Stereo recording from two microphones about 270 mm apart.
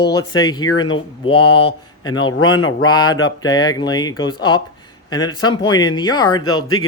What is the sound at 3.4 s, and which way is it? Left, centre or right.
Speech, centre.